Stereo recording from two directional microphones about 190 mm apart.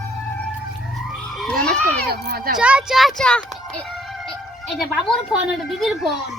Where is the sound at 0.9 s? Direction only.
Centre (ahead or behind).